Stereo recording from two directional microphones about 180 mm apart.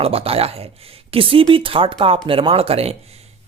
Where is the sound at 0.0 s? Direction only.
30° right (ahead or behind).